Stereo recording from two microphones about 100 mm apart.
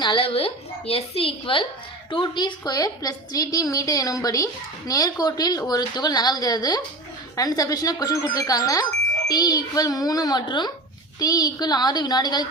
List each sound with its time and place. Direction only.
0.0 s a woman's voice: 55° left (ahead or behind)
0.3 s a woman's voice: 75° left (ahead or behind)
2.0 s a woman's voice: 55° left (ahead or behind)